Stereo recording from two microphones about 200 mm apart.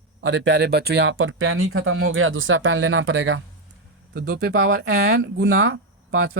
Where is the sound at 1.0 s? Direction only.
85° right.